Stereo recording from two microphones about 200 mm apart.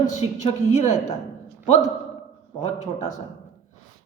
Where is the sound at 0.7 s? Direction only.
35° left (ahead or behind).